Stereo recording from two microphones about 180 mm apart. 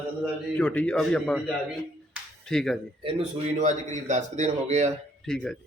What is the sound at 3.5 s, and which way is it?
Speech, 40° right (ahead or behind).